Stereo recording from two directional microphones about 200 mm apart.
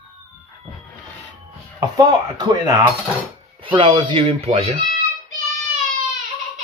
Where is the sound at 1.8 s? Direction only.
20° right (ahead or behind).